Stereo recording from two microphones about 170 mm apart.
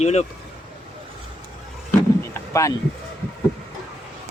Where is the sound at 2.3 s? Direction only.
20° left (ahead or behind).